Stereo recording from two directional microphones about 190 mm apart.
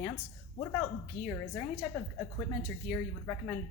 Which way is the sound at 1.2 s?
5° left (ahead or behind).